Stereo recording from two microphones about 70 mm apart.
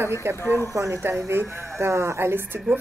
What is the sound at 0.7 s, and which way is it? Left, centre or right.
Speech, right.